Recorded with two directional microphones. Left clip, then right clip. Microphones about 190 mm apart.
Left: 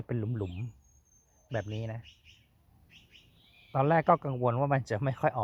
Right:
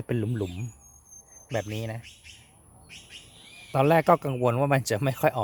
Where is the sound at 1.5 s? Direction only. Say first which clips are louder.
Right 5 dB; 15° right (ahead or behind).